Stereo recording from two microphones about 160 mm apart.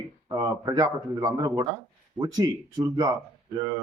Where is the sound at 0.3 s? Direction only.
20° right (ahead or behind).